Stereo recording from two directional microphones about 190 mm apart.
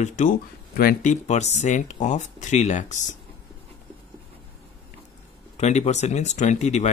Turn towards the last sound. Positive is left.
turn(degrees=35)  # may be behind; listen again after turning